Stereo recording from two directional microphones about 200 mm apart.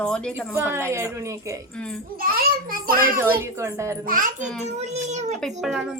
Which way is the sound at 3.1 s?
10° right (ahead or behind).